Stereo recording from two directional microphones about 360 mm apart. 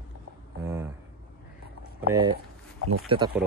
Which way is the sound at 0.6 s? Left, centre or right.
Centre.